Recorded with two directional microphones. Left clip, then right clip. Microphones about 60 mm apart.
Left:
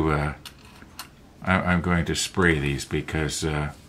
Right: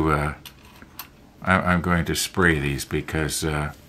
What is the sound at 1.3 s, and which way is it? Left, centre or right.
Speech, right.